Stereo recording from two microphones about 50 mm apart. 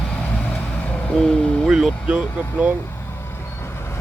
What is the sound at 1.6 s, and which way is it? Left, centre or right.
Speech, centre.